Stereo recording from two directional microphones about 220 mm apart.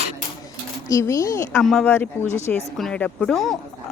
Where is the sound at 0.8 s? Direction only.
15° left (ahead or behind).